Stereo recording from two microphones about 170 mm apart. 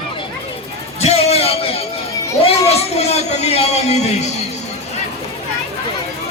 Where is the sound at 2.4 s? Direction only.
35° left (ahead or behind).